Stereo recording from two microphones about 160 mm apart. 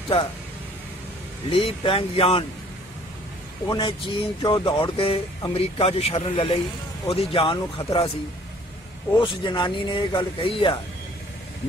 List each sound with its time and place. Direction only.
1.5 s speech: 35° left (ahead or behind)
3.7 s speech: 30° left (ahead or behind)
9.2 s speech: 30° left (ahead or behind)